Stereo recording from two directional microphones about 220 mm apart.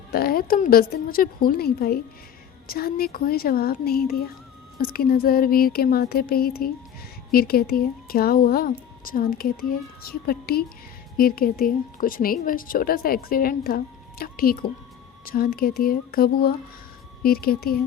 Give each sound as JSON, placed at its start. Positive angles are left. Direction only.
{"t": 0.1, "sound": "a woman's voice", "side_deg": 45}